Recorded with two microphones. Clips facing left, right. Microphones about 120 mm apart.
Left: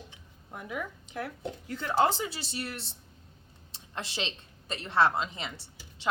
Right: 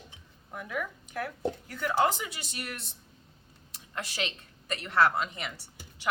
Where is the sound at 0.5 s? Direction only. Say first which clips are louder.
Right 2 dB; 25° left (ahead or behind).